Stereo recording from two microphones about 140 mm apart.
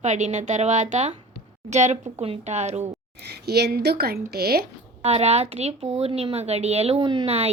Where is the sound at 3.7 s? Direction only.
90° right.